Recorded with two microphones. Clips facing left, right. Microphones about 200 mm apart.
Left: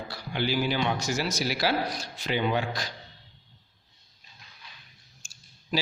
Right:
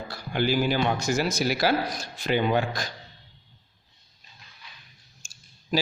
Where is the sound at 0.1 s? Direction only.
50° right (ahead or behind).